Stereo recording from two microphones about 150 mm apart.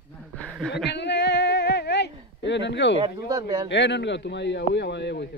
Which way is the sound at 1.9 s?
90° left.